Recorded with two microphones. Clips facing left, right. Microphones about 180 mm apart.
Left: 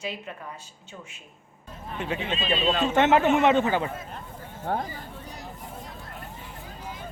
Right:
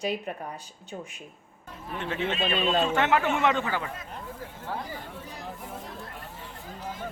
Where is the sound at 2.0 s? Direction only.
15° left (ahead or behind).